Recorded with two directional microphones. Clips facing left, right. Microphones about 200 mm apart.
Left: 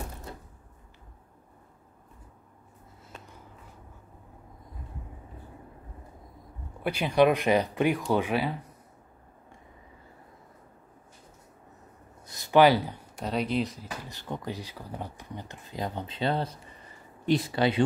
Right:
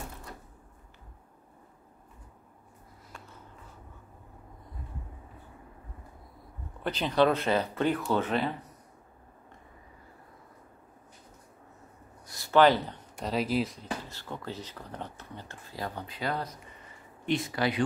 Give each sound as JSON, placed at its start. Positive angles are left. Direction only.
{"t": 6.8, "sound": "speech", "side_deg": 10}
{"t": 12.3, "sound": "speech", "side_deg": 15}
{"t": 14.0, "sound": "speech", "side_deg": 15}